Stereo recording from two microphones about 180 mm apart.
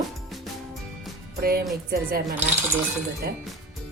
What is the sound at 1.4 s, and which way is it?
Music, 55° right (ahead or behind).